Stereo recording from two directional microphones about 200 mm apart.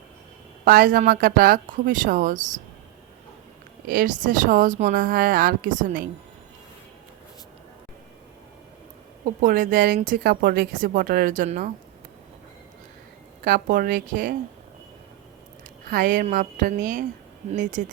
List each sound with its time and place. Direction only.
0.6 s speech: 45° right (ahead or behind)
3.8 s speech: 45° right (ahead or behind)
9.2 s speech: 45° right (ahead or behind)
13.4 s speech: 45° right (ahead or behind)
15.9 s speech: 40° right (ahead or behind)